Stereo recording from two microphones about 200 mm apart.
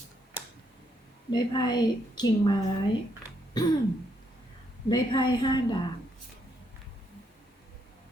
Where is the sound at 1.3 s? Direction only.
20° left (ahead or behind).